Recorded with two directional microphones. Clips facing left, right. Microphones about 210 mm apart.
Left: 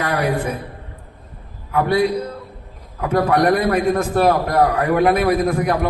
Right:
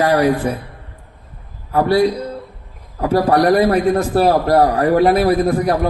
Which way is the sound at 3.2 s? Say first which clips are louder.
Right 3 dB; 35° right (ahead or behind).